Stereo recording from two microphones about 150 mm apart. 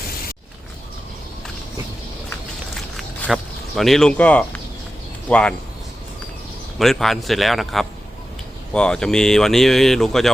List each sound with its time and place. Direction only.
3.2 s speech: centre (ahead or behind)
6.7 s speech: centre (ahead or behind)